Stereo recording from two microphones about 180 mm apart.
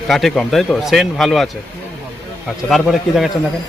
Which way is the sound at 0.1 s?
Centre (ahead or behind).